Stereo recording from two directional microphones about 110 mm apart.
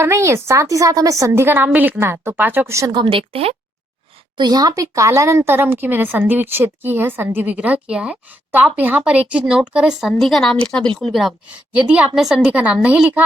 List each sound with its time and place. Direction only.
0.0 s speech: 25° right (ahead or behind)
3.0 s a woman's voice: 55° right (ahead or behind)
4.4 s a woman's voice: 40° right (ahead or behind); by 11.3 s centre (ahead or behind)
11.7 s a woman's voice: 10° right (ahead or behind)